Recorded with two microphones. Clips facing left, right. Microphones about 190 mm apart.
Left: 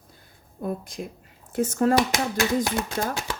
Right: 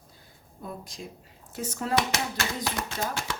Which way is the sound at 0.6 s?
55° left (ahead or behind).